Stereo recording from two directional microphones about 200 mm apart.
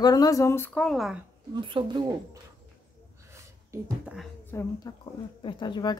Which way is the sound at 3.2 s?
15° right (ahead or behind).